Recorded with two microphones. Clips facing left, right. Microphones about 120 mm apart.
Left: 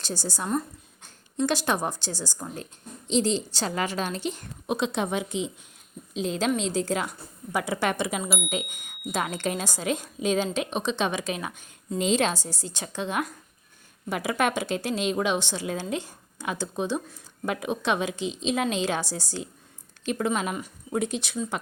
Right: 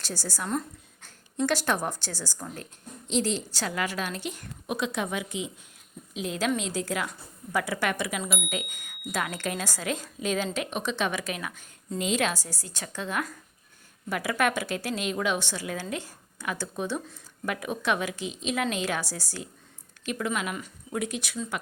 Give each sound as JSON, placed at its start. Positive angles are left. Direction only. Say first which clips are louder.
{"t": 0.0, "sound": "a woman's voice", "louder": "left 3 dB", "side_deg": 20}